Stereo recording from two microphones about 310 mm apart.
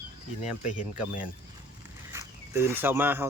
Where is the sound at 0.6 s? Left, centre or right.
Left.